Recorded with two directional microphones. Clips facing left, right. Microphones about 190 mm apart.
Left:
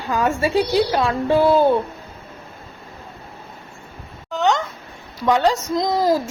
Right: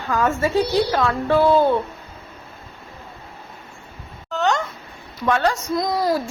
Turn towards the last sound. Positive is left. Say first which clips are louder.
# left 2 dB
turn(degrees=20)  # may be behind; listen again after turning